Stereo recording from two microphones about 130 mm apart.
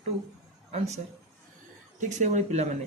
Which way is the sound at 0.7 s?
60° right (ahead or behind).